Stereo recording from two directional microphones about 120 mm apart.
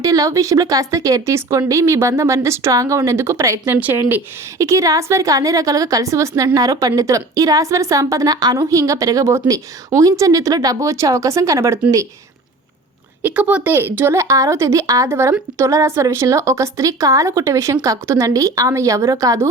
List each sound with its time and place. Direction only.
0.0 s a woman's voice: 30° right (ahead or behind)
3.8 s speech: 15° right (ahead or behind)
4.5 s a woman's voice: 25° right (ahead or behind)
13.2 s a woman's voice: 10° right (ahead or behind); by 19.5 s 25° right (ahead or behind)